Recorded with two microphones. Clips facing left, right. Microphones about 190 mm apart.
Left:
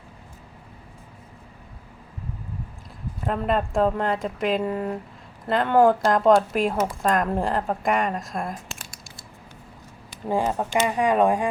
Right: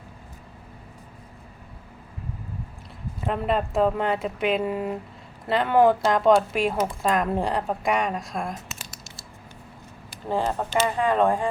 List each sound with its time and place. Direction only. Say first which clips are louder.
3.2 s speech: left 1 dB; centre (ahead or behind)
10.2 s speech: left 2 dB; 10° left (ahead or behind)